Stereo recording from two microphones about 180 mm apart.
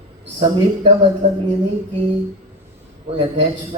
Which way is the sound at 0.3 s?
30° right (ahead or behind).